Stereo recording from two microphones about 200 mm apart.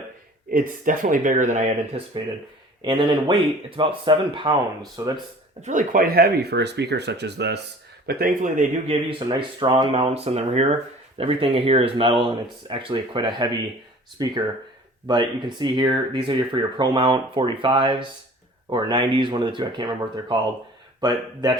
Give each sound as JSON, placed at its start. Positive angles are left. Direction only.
{"t": 0.5, "sound": "speech", "side_deg": -40}
{"t": 2.8, "sound": "speech", "side_deg": -25}
{"t": 5.6, "sound": "speech", "side_deg": -40}